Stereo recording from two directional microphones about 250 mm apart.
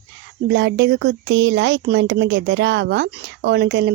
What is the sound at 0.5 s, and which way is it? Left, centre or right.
Speech, right.